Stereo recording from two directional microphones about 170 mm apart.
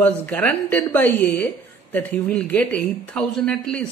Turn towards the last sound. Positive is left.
turn(degrees=5)  # may be behind; listen again after turning